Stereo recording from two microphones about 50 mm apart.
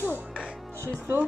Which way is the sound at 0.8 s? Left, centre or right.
Right.